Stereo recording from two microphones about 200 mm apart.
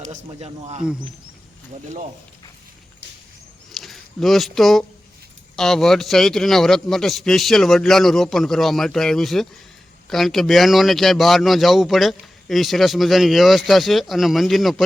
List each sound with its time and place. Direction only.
0.1 s speech: 30° right (ahead or behind)
3.7 s a sound: centre (ahead or behind)
5.5 s a man's voice: centre (ahead or behind)